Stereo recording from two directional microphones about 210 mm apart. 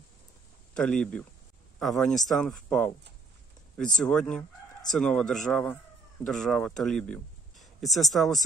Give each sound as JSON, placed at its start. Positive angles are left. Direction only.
{"t": 0.7, "sound": "speech", "side_deg": 5}